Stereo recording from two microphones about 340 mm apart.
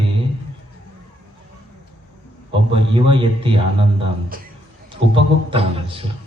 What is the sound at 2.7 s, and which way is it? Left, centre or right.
A man's voice, centre.